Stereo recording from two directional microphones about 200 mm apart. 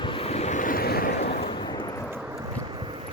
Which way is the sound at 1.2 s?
30° left (ahead or behind).